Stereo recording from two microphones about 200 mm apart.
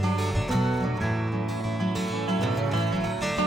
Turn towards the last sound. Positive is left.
turn(degrees=0)  # may be behind; listen again after turning